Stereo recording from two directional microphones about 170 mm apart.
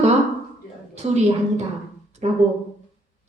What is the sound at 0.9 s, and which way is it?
Speech, 40° right (ahead or behind).